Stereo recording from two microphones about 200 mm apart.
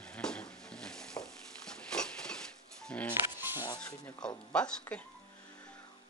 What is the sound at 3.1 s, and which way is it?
Music, 10° right (ahead or behind).